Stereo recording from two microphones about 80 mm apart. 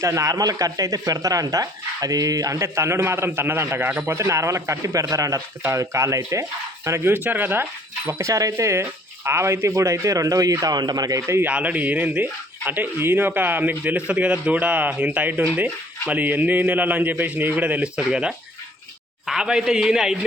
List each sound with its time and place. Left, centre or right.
0.0 s speech: right
8.2 s speech: right
11.4 s a man's voice: centre